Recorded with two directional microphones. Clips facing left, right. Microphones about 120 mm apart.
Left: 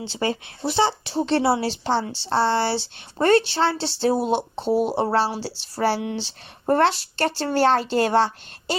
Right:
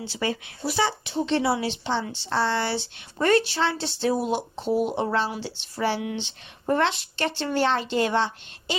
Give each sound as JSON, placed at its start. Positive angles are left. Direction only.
{"t": 0.0, "sound": "speech", "side_deg": 30}